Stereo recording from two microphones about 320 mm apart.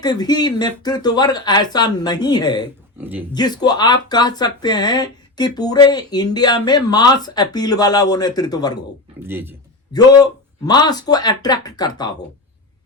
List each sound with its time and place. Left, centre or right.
0.0 s speech: centre
3.0 s speech: centre
3.3 s speech: centre
9.2 s speech: centre
9.9 s speech: centre